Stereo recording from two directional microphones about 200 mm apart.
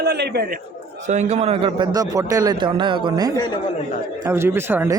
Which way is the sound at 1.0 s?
35° right (ahead or behind).